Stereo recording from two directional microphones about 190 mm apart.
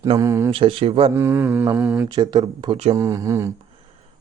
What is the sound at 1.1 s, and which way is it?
Mantra, 15° right (ahead or behind).